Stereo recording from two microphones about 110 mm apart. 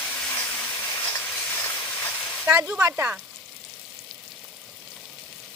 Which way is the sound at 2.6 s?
15° right (ahead or behind).